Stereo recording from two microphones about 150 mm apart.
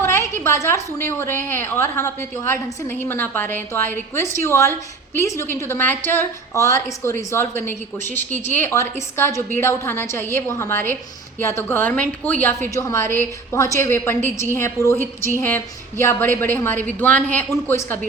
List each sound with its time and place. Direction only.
0.0 s a woman's voice: 15° left (ahead or behind)